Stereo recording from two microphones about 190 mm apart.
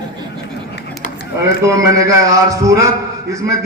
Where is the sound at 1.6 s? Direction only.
15° right (ahead or behind).